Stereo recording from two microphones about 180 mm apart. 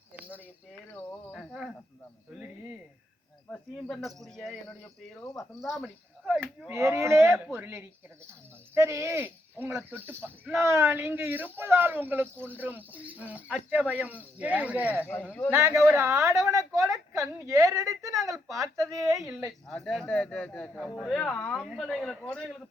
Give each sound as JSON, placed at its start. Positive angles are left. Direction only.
{"t": 1.3, "sound": "a sound", "side_deg": 0}
{"t": 3.5, "sound": "speech", "side_deg": 5}
{"t": 15.0, "sound": "speech", "side_deg": 10}
{"t": 15.4, "sound": "a woman's voice", "side_deg": -15}
{"t": 19.6, "sound": "speech", "side_deg": 5}
{"t": 21.7, "sound": "speech", "side_deg": -5}